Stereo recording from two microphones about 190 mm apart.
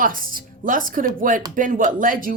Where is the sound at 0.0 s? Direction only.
45° right (ahead or behind).